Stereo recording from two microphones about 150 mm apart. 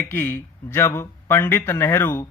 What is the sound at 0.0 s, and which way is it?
Speech, 15° left (ahead or behind).